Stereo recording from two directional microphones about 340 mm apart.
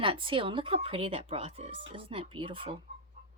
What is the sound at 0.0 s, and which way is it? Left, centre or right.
Speech, centre.